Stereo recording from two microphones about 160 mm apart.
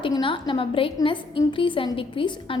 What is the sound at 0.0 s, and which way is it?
A woman's voice, 30° left (ahead or behind).